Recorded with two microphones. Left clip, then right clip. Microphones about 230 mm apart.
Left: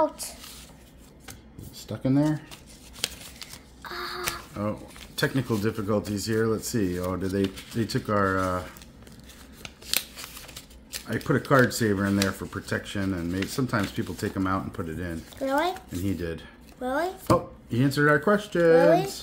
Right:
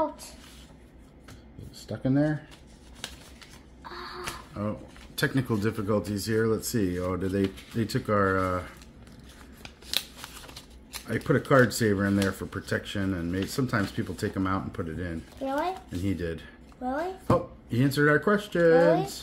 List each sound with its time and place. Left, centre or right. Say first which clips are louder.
1.9 s speech: left 2 dB; centre
3.9 s a sound: left 6 dB; left
4.6 s speech: left 3 dB; centre
9.6 s scissors: left 1 dB; left
11.1 s speech: even; centre